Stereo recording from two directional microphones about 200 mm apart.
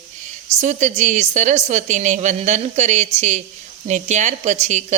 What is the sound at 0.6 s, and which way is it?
A woman's voice, 40° right (ahead or behind).